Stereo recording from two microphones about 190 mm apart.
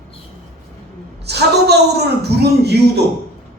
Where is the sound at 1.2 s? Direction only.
60° right (ahead or behind).